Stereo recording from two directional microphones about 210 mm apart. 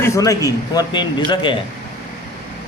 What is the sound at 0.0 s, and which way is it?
A man's voice, 15° left (ahead or behind).